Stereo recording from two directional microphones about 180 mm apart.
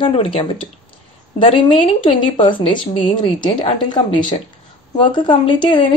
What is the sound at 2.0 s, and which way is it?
Speech, 30° left (ahead or behind).